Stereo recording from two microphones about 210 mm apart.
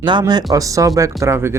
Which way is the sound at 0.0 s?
20° right (ahead or behind).